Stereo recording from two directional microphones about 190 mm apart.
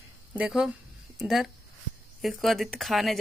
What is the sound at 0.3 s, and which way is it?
Speech, 5° right (ahead or behind).